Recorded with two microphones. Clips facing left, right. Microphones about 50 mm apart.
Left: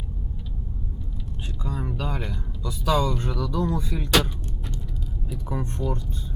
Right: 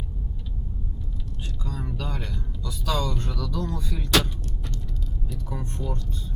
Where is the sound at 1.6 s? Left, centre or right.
Centre.